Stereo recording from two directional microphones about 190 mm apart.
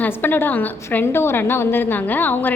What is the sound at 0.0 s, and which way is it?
A woman's voice, 10° left (ahead or behind).